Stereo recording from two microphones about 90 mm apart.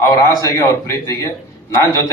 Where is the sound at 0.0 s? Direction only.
40° left (ahead or behind).